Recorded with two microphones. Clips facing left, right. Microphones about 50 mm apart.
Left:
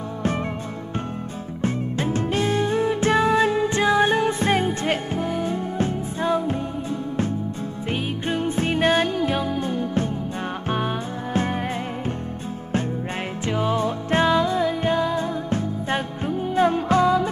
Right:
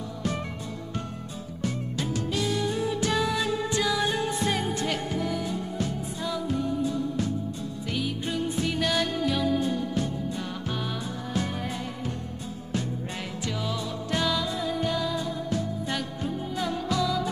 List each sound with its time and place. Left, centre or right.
1.6 s music: left
11.3 s music: left
13.5 s music: left